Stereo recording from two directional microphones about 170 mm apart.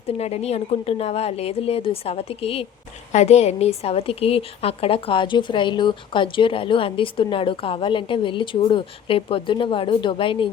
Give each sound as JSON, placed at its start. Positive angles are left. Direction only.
{"t": 0.2, "sound": "a woman's voice", "side_deg": 40}